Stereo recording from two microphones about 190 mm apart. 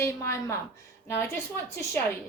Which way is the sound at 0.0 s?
15° left (ahead or behind).